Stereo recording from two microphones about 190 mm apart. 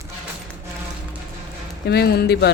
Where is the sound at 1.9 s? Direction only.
55° left (ahead or behind).